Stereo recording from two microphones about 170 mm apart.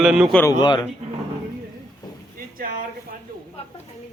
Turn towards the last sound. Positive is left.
turn(degrees=-55)  # may be behind; listen again after turning